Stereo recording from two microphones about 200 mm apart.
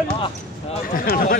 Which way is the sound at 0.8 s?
45° left (ahead or behind).